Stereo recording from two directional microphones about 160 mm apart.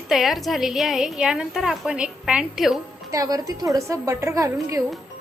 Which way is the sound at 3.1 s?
20° right (ahead or behind).